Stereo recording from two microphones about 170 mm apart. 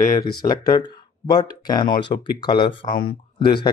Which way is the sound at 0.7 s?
25° left (ahead or behind).